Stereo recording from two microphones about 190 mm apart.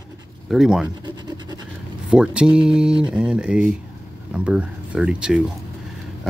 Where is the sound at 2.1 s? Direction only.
5° right (ahead or behind).